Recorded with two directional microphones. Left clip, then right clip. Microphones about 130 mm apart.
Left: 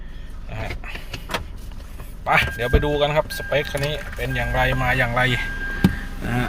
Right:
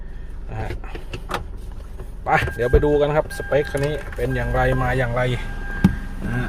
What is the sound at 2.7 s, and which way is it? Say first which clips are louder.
Speech: right 3 dB; 45° right (ahead or behind).